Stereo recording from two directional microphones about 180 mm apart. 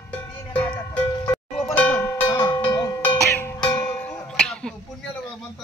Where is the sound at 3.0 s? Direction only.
10° left (ahead or behind).